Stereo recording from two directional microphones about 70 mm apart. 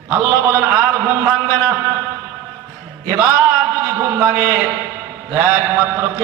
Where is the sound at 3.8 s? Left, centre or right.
Right.